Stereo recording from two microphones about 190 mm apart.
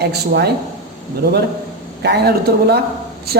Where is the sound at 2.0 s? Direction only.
60° right (ahead or behind).